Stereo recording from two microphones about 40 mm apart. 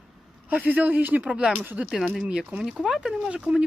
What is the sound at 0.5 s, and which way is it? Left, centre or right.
Speech, right.